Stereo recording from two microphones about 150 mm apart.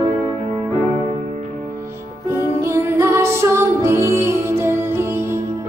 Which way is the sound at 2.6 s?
20° right (ahead or behind).